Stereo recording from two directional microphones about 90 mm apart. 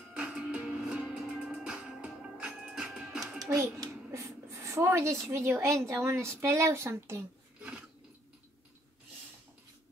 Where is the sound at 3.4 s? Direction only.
35° right (ahead or behind).